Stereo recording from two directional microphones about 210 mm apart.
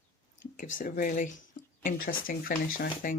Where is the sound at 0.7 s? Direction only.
40° left (ahead or behind).